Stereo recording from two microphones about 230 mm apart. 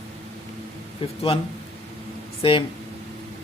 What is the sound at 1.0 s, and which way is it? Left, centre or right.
Speech, left.